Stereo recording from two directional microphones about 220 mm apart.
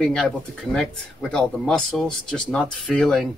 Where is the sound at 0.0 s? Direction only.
5° left (ahead or behind).